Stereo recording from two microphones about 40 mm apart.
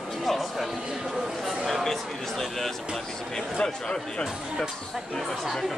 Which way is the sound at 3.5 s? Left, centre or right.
Left.